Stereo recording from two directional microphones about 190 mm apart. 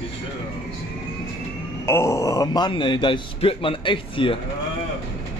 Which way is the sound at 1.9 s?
15° left (ahead or behind).